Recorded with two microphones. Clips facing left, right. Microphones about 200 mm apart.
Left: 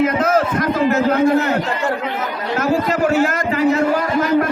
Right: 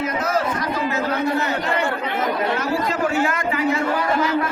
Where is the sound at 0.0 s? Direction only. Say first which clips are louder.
Left 6 dB; 50° left (ahead or behind).